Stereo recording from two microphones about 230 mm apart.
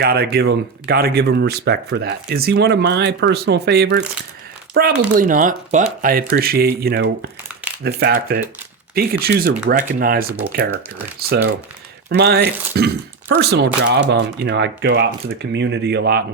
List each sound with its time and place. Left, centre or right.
0.0 s speech: right